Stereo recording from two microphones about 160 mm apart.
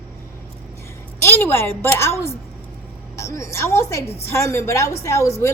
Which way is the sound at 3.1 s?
20° left (ahead or behind).